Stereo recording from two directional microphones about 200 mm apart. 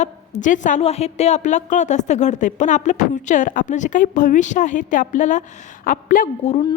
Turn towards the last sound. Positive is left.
turn(degrees=40)  # may be behind; listen again after turning